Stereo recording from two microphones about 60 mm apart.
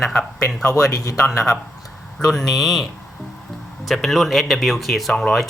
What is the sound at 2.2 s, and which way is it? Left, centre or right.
Speech, centre.